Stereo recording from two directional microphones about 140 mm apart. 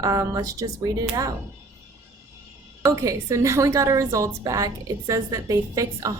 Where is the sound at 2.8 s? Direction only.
25° right (ahead or behind).